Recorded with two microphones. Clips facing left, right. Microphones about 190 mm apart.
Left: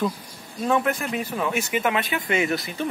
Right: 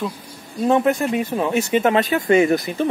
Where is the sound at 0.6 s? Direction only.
30° right (ahead or behind).